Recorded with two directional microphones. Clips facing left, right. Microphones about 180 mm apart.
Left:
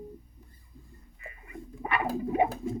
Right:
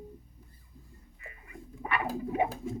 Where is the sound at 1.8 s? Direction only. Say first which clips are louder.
Left 3 dB; 30° left (ahead or behind).